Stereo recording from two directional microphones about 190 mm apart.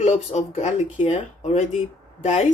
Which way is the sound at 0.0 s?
35° left (ahead or behind).